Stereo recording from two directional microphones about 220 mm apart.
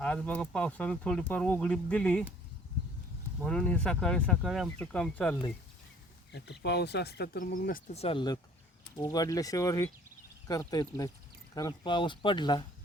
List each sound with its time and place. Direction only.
0.0 s speech: 5° left (ahead or behind)
3.4 s speech: 5° left (ahead or behind)
6.3 s speech: 50° left (ahead or behind)
8.0 s speech: 20° left (ahead or behind)